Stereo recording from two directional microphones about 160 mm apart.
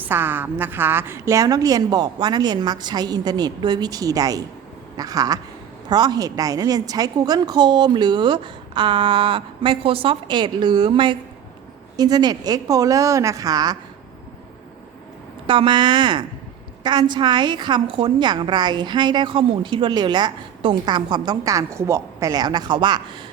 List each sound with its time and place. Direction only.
0.0 s a woman's voice: 15° right (ahead or behind)
15.4 s a woman's voice: 30° right (ahead or behind)